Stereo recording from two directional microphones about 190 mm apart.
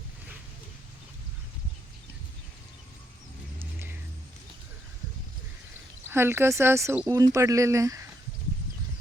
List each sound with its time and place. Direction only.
3.6 s vehicle: 10° right (ahead or behind)
6.1 s speech: 10° right (ahead or behind)